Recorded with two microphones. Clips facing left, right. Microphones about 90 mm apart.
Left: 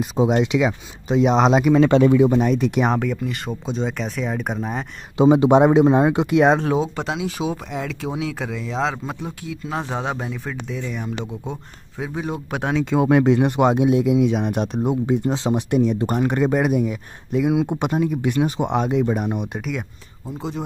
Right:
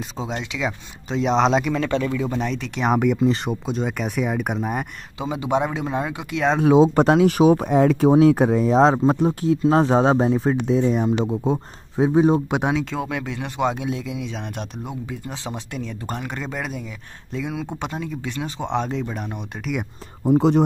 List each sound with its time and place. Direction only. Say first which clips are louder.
0.0 s speech: left 10 dB; 15° left (ahead or behind)
0.7 s speech: left 5 dB; 5° left (ahead or behind)
2.0 s speech: left 9 dB; 20° left (ahead or behind)
2.9 s speech: right 4 dB; 15° right (ahead or behind)
5.1 s speech: left 9 dB; 25° left (ahead or behind)
7.0 s speech: right 10 dB; 50° right (ahead or behind); by 12.4 s 30° right (ahead or behind)
12.4 s speech: right 3 dB; 15° right (ahead or behind)
13.1 s speech: left 12 dB; 25° left (ahead or behind); by 19.7 s 10° left (ahead or behind)
20.2 s speech: right 12 dB; 65° right (ahead or behind)